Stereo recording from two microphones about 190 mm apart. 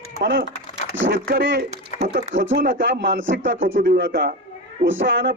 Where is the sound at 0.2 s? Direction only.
65° right (ahead or behind).